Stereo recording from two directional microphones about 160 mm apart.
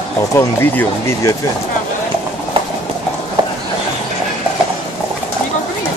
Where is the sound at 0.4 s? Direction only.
15° left (ahead or behind).